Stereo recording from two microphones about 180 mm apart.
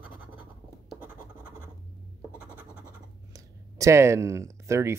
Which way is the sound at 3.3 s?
20° right (ahead or behind).